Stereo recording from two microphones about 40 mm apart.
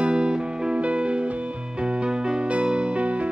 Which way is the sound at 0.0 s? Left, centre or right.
Right.